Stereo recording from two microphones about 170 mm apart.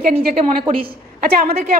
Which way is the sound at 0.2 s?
60° right (ahead or behind).